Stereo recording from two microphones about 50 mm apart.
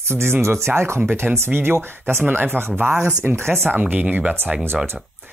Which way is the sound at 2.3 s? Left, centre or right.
Right.